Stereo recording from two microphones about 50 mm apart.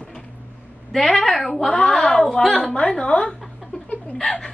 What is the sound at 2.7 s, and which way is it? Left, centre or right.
Speech, centre.